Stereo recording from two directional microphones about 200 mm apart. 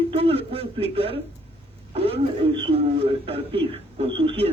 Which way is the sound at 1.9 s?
30° right (ahead or behind).